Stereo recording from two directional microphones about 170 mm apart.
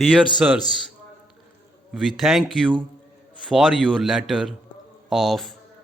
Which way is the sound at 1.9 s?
Centre (ahead or behind).